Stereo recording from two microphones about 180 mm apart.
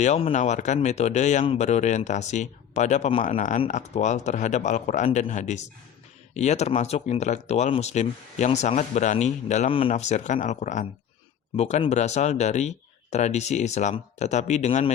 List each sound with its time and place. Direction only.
0.0 s speech: 35° left (ahead or behind)